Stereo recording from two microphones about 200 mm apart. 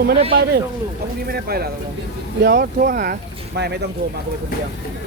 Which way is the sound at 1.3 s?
50° right (ahead or behind).